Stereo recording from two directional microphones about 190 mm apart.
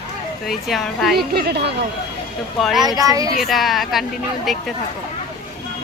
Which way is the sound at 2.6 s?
Centre (ahead or behind).